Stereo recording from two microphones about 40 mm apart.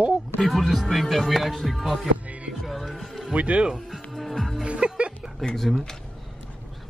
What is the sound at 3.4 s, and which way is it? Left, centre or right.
Speech, right.